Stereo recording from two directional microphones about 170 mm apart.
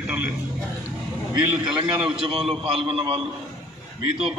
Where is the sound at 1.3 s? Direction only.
25° right (ahead or behind).